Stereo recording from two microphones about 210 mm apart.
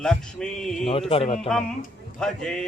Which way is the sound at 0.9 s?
30° left (ahead or behind).